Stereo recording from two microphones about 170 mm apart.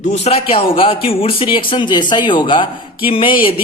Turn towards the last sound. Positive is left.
turn(degrees=30)  # may be behind; listen again after turning